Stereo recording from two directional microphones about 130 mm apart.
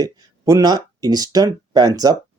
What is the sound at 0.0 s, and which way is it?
Speech, 25° right (ahead or behind).